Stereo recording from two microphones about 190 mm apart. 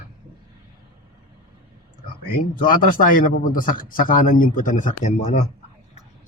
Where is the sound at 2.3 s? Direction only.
50° left (ahead or behind).